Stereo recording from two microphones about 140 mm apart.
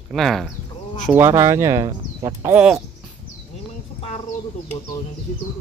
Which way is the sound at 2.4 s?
10° right (ahead or behind).